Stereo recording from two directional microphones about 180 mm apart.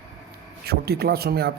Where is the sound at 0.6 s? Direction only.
60° right (ahead or behind).